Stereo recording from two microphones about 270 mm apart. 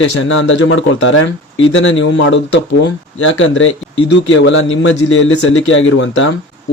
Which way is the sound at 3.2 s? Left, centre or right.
Left.